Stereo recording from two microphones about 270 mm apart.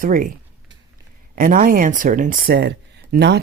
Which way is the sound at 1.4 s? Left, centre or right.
Right.